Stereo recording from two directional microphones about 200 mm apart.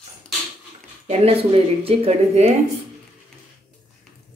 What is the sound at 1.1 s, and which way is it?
Speech, 30° right (ahead or behind).